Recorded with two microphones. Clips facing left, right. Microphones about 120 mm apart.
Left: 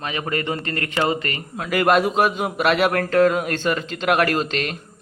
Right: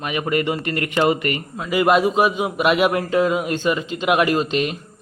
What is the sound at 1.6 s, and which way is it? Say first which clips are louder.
A man's voice: right 1 dB; 5° right (ahead or behind).